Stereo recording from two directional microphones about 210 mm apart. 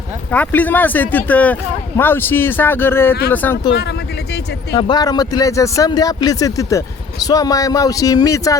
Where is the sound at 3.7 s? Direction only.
55° left (ahead or behind).